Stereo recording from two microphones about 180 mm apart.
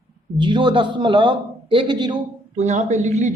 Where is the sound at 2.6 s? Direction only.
40° right (ahead or behind).